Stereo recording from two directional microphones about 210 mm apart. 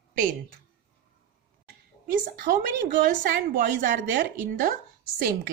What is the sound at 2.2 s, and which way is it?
A woman's voice, 40° right (ahead or behind).